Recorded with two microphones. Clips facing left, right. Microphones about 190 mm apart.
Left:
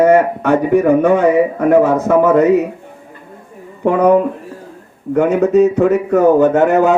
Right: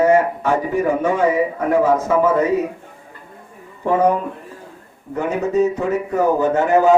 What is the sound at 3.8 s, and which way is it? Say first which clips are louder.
Speech: left 3 dB; 65° left (ahead or behind).